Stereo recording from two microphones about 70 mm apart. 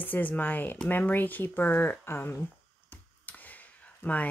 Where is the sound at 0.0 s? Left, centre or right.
Left.